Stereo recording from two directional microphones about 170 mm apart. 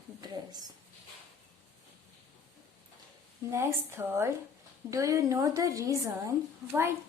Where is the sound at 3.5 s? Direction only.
15° right (ahead or behind).